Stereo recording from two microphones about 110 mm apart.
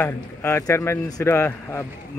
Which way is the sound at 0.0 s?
20° left (ahead or behind).